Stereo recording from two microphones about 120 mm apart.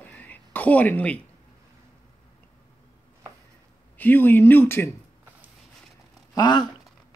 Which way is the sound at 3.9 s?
15° left (ahead or behind).